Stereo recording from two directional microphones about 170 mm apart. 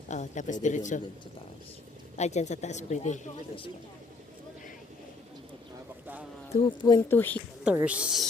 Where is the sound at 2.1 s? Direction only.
40° left (ahead or behind).